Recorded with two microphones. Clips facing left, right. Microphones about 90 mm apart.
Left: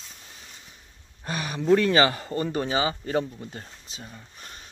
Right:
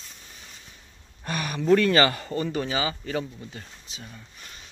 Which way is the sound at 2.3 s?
35° left (ahead or behind).